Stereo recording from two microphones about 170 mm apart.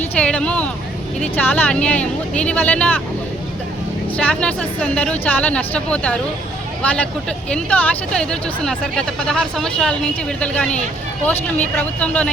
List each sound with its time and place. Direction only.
0.0 s a sound: 5° left (ahead or behind)
1.2 s speech: 10° left (ahead or behind)
4.2 s speech: 5° left (ahead or behind)